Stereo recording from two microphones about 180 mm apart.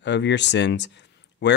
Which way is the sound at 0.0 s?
75° left (ahead or behind).